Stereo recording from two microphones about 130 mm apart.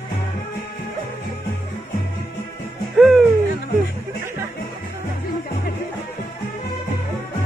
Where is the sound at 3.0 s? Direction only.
Centre (ahead or behind).